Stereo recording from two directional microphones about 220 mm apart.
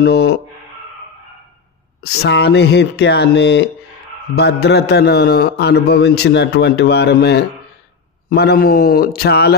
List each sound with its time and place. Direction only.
0.0 s a man's voice: 50° left (ahead or behind)
2.0 s a man's voice: 50° left (ahead or behind)